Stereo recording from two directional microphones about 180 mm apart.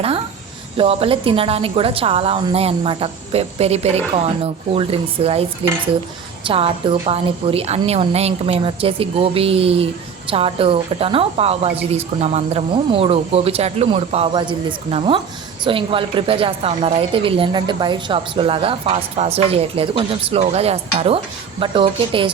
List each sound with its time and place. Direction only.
0.8 s a woman's voice: 30° right (ahead or behind)